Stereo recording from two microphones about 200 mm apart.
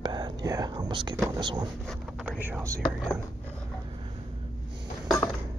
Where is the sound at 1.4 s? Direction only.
20° right (ahead or behind).